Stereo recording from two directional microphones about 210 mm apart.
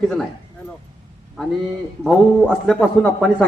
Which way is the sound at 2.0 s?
Centre (ahead or behind).